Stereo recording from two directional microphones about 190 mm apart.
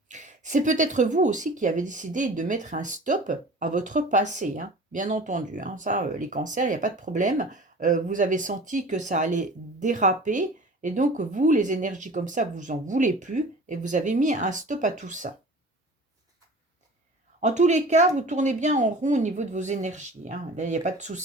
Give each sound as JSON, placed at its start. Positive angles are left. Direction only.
{"t": 0.1, "sound": "speech", "side_deg": -40}
{"t": 17.4, "sound": "speech", "side_deg": -40}